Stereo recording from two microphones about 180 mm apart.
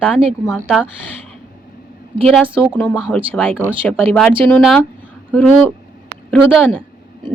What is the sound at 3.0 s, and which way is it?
A woman's voice, 5° left (ahead or behind).